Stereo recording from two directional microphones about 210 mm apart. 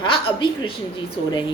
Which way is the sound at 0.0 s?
25° left (ahead or behind).